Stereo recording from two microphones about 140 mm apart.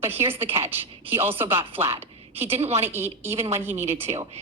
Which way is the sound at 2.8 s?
15° right (ahead or behind).